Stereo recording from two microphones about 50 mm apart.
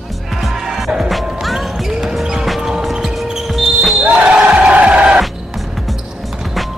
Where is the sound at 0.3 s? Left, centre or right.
Centre.